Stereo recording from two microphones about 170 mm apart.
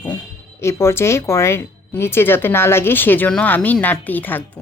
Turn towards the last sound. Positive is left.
turn(degrees=10)  # may be behind; listen again after turning